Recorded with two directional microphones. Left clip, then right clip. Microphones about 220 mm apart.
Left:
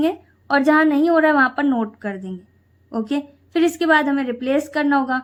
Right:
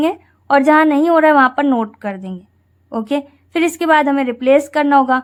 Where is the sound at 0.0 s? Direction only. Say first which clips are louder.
Right 3 dB; 25° right (ahead or behind).